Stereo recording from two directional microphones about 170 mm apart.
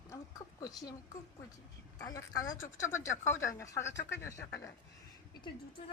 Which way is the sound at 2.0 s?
20° left (ahead or behind).